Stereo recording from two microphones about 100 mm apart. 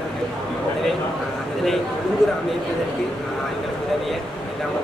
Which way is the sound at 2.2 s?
5° left (ahead or behind).